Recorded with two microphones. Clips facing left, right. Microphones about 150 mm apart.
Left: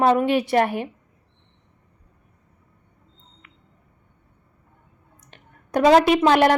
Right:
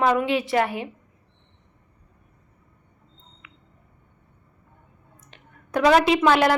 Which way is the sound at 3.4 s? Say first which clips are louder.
Right 5 dB; 45° left (ahead or behind).